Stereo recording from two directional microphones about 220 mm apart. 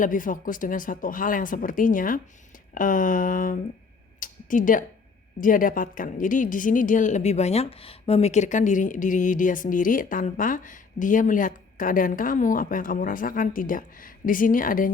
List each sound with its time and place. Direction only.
0.0 s a woman's voice: 35° left (ahead or behind)